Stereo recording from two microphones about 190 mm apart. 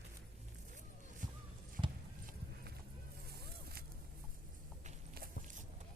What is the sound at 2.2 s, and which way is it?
Clip-clop, 55° right (ahead or behind).